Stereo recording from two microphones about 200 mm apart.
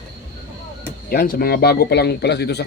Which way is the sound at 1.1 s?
50° left (ahead or behind).